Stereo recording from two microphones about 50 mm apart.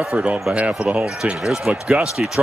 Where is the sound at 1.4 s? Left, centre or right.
Centre.